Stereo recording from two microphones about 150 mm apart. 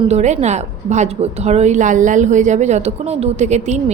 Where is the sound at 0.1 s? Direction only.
50° right (ahead or behind).